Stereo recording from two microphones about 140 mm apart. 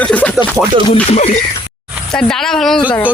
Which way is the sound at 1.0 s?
50° left (ahead or behind).